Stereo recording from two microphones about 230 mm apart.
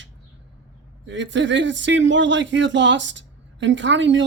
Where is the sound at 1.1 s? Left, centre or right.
Right.